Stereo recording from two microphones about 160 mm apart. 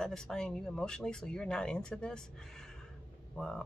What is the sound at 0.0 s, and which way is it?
Speech, 5° left (ahead or behind).